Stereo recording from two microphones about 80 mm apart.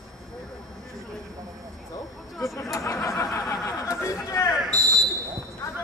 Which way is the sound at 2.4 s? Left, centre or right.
Left.